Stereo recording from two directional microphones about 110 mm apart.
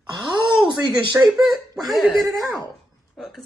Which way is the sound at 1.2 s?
15° right (ahead or behind).